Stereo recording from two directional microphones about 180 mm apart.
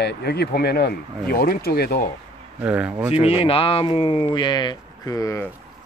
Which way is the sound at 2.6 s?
5° right (ahead or behind).